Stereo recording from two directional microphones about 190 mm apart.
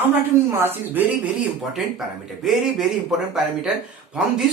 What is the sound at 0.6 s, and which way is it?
Speech, 10° right (ahead or behind).